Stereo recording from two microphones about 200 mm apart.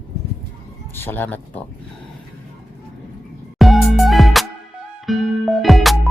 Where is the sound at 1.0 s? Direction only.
10° left (ahead or behind).